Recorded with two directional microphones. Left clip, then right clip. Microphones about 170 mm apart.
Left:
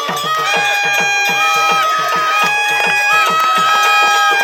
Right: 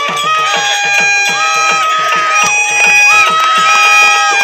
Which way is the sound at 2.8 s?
30° right (ahead or behind).